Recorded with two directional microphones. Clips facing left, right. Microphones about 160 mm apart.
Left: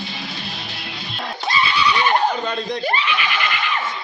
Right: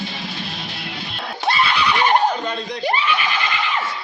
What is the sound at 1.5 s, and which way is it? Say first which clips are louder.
Neigh: right 1 dB; 60° right (ahead or behind).